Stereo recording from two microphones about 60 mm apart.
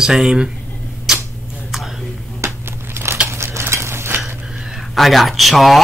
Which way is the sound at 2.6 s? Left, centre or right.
Right.